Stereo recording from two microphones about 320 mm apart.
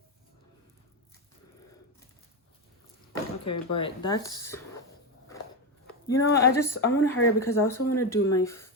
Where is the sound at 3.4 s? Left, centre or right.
Left.